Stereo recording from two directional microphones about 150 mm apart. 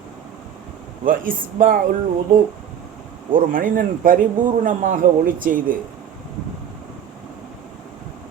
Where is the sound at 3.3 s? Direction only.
65° right (ahead or behind).